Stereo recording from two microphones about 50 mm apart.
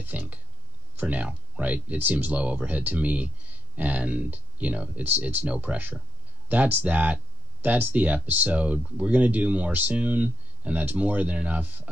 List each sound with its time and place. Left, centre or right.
0.0 s speech: right
2.0 s speech: right
5.0 s speech: right